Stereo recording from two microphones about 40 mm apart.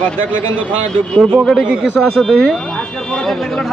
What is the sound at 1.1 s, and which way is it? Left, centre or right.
Speech, centre.